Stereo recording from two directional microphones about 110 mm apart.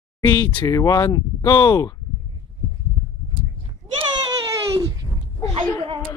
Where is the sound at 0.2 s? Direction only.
45° left (ahead or behind).